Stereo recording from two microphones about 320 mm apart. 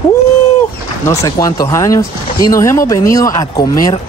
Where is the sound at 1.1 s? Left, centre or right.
Centre.